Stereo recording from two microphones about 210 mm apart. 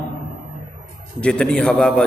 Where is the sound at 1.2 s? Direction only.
5° left (ahead or behind).